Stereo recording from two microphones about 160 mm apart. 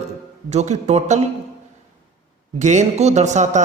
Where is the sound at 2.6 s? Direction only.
45° right (ahead or behind).